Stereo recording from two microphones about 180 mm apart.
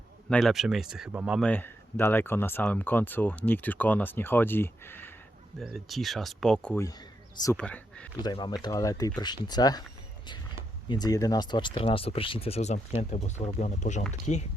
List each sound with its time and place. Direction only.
0.3 s speech: 5° left (ahead or behind)
1.5 s speech: 10° left (ahead or behind)
5.5 s speech: centre (ahead or behind)
8.2 s speech: 25° left (ahead or behind)
10.8 s speech: 20° left (ahead or behind); by 14.4 s 40° left (ahead or behind)